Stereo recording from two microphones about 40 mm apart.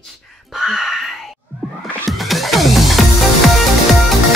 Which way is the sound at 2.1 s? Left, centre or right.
Centre.